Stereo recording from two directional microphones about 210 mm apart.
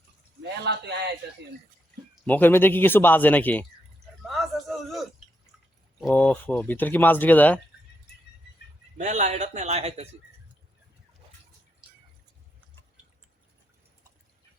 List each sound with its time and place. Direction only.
0.4 s a man's voice: 55° right (ahead or behind)
2.2 s speech: 10° left (ahead or behind)
4.2 s a sound: centre (ahead or behind)
6.0 s speech: 5° left (ahead or behind)
9.0 s a man's voice: 35° right (ahead or behind)